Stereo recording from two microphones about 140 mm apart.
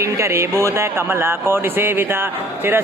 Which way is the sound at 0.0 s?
20° right (ahead or behind).